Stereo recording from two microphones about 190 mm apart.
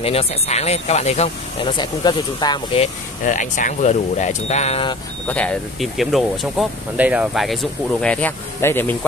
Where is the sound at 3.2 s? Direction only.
40° left (ahead or behind).